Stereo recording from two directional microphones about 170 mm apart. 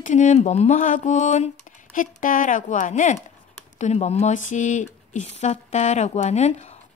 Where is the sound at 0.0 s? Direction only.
45° left (ahead or behind).